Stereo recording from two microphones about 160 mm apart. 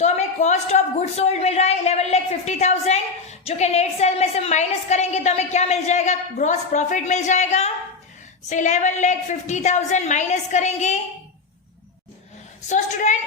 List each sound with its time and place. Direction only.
0.0 s a woman's voice: 45° left (ahead or behind)
12.6 s a woman's voice: 50° left (ahead or behind)